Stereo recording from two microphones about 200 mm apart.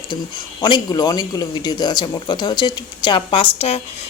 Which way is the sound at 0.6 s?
20° left (ahead or behind).